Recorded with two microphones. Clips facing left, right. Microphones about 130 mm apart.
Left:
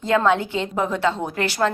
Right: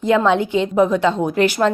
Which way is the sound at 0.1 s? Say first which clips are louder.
Right 3 dB; 20° right (ahead or behind).